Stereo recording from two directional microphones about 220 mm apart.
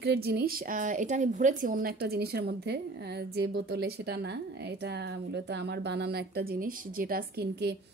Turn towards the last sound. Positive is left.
turn(degrees=-45)  # may be behind; listen again after turning